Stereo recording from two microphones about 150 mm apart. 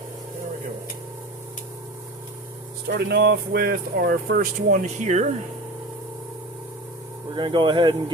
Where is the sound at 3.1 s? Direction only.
90° right.